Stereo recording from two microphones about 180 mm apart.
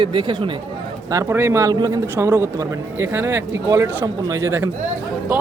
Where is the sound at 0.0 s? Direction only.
25° right (ahead or behind).